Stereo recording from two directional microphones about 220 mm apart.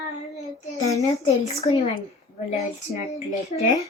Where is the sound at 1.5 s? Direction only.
25° left (ahead or behind).